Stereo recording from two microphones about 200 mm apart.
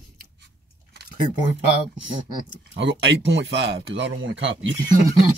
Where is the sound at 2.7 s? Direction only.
60° right (ahead or behind).